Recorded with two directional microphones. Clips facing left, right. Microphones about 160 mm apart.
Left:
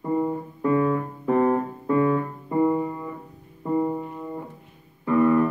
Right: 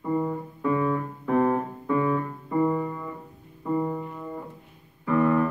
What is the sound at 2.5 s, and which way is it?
Music, 15° left (ahead or behind).